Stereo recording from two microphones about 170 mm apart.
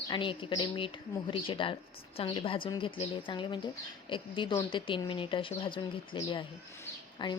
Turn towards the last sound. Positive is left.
turn(degrees=30)  # may be behind; listen again after turning